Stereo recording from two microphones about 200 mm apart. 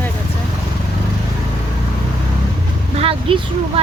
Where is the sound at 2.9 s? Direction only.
30° right (ahead or behind).